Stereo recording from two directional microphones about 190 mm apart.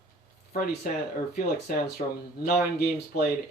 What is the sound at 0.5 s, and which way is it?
Speech, 50° left (ahead or behind).